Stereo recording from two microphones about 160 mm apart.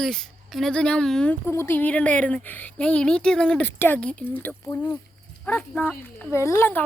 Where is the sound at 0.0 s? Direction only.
Centre (ahead or behind).